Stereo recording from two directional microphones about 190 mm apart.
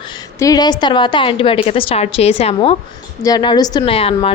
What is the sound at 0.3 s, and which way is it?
A woman's voice, 20° left (ahead or behind).